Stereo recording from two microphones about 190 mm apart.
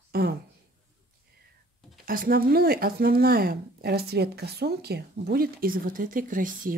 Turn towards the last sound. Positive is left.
turn(degrees=-45)  # may be behind; listen again after turning